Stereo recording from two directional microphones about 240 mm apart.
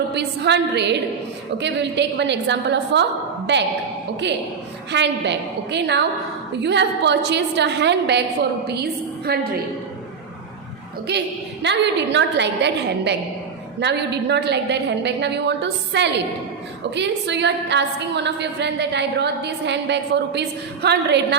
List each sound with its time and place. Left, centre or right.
0.1 s a woman's voice: right
4.9 s a woman's voice: right
11.1 s a woman's voice: right